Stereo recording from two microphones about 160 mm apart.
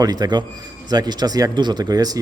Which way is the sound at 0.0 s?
25° right (ahead or behind).